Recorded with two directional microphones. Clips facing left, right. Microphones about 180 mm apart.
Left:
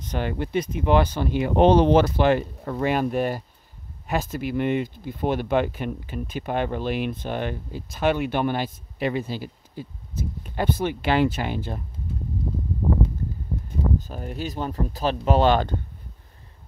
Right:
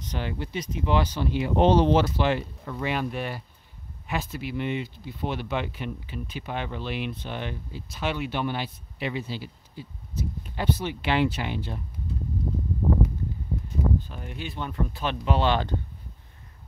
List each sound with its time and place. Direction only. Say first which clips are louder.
0.1 s speech: left 7 dB; 50° left (ahead or behind)
13.9 s speech: left 3 dB; 40° left (ahead or behind)